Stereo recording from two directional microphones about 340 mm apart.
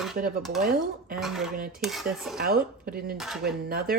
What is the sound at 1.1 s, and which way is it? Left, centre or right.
Dishes, centre.